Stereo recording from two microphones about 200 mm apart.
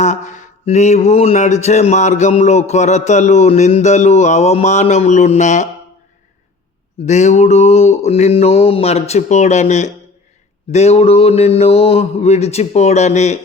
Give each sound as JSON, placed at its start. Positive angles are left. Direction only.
{"t": 0.0, "sound": "mantra", "side_deg": 35}
{"t": 7.0, "sound": "mantra", "side_deg": 35}